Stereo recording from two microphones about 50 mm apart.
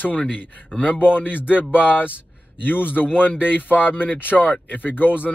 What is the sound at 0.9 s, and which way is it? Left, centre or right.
Speech, left.